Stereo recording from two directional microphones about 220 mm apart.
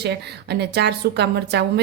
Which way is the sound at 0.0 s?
50° right (ahead or behind).